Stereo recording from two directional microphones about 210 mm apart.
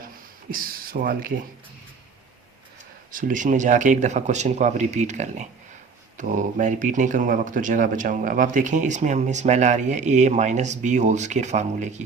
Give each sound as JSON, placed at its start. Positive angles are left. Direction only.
{"t": 0.5, "sound": "speech", "side_deg": -45}
{"t": 3.1, "sound": "a man's voice", "side_deg": -40}